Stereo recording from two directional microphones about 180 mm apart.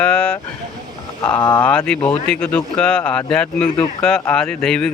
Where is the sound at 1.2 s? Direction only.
25° left (ahead or behind).